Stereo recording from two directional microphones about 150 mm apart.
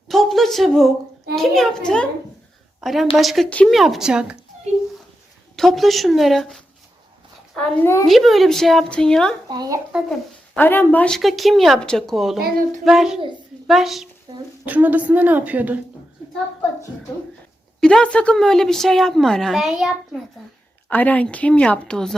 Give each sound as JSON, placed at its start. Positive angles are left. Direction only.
{"t": 0.1, "sound": "a sound", "side_deg": 0}
{"t": 1.4, "sound": "speech", "side_deg": 5}
{"t": 5.5, "sound": "speech", "side_deg": 0}
{"t": 9.5, "sound": "speech", "side_deg": -25}
{"t": 9.9, "sound": "speech", "side_deg": 0}
{"t": 10.6, "sound": "speech", "side_deg": 15}
{"t": 14.3, "sound": "speech", "side_deg": -40}
{"t": 14.7, "sound": "a woman's voice", "side_deg": -10}
{"t": 17.7, "sound": "speech", "side_deg": 5}
{"t": 20.9, "sound": "speech", "side_deg": 10}